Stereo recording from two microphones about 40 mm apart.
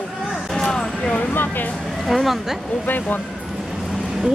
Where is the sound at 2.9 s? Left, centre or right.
Left.